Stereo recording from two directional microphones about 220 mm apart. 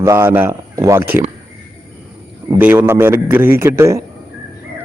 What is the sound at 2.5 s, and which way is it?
Speech, 10° right (ahead or behind).